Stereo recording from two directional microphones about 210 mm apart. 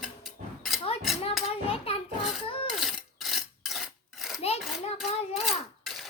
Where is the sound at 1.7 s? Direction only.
30° left (ahead or behind).